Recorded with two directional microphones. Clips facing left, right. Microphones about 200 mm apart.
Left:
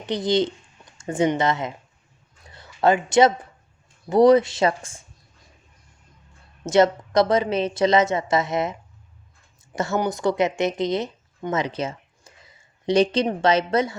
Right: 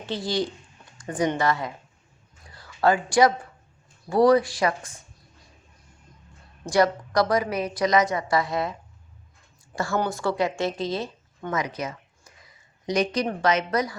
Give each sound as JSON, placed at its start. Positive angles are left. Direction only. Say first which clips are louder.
{"t": 0.0, "sound": "a woman's voice", "louder": "left 6 dB", "side_deg": 20}
{"t": 2.5, "sound": "a sound", "louder": "left 2 dB", "side_deg": 20}
{"t": 4.1, "sound": "a woman's voice", "louder": "left 3 dB", "side_deg": 20}
{"t": 6.7, "sound": "a woman's voice", "louder": "left 4 dB", "side_deg": 25}